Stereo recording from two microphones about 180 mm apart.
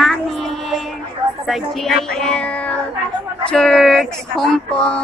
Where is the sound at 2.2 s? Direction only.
5° left (ahead or behind).